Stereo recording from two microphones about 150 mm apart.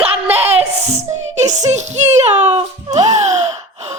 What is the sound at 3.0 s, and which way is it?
Music, 50° right (ahead or behind).